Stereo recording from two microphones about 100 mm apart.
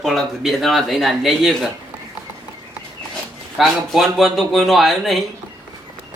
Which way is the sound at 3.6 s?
Centre (ahead or behind).